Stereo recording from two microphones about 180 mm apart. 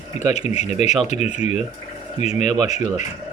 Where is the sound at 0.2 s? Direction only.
40° left (ahead or behind).